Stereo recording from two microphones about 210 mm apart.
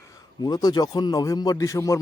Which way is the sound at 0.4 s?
20° left (ahead or behind).